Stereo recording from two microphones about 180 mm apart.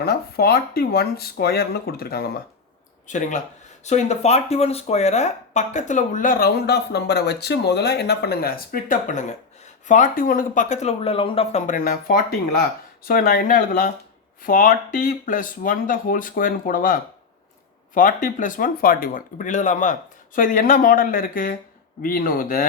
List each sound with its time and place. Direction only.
0.0 s speech: 60° left (ahead or behind)
3.1 s speech: 45° left (ahead or behind)